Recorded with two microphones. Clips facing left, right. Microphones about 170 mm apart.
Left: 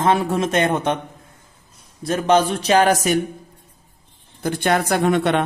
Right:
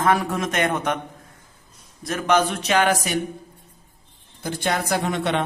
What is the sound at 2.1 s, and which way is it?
Speech, 30° left (ahead or behind).